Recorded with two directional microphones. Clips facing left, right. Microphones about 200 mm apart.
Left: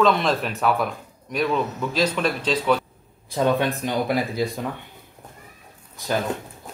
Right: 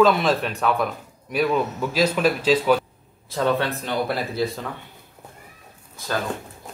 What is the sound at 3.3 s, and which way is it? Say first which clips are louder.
Speech: left 1 dB; 15° left (ahead or behind).